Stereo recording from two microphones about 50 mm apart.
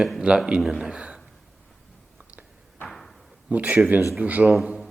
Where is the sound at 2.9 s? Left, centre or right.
Centre.